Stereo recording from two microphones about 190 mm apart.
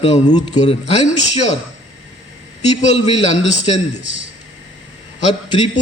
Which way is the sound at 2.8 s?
35° left (ahead or behind).